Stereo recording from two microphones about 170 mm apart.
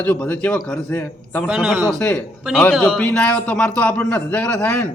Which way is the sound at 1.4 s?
10° right (ahead or behind).